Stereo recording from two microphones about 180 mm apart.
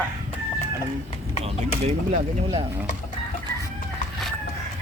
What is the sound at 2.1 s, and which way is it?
Speech, 30° right (ahead or behind).